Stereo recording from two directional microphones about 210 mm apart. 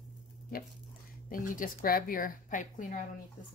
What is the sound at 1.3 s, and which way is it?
A woman's voice, 40° left (ahead or behind).